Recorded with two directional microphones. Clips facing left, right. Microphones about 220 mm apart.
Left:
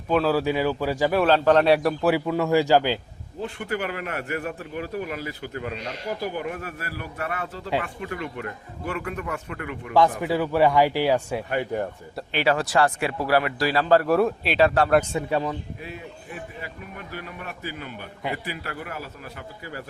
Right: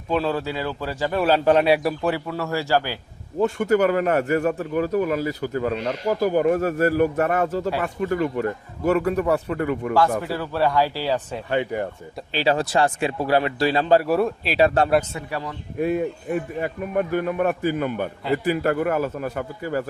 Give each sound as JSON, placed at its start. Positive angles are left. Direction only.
{"t": 0.1, "sound": "a man's voice", "side_deg": 5}
{"t": 0.4, "sound": "speech", "side_deg": 15}
{"t": 1.1, "sound": "a man's voice", "side_deg": -5}
{"t": 2.0, "sound": "speech", "side_deg": 15}
{"t": 3.4, "sound": "a man's voice", "side_deg": -45}
{"t": 10.2, "sound": "speech", "side_deg": 15}
{"t": 11.4, "sound": "a man's voice", "side_deg": -25}
{"t": 14.0, "sound": "a man's voice", "side_deg": 0}
{"t": 15.1, "sound": "a man's voice", "side_deg": 20}
{"t": 15.8, "sound": "speech", "side_deg": -55}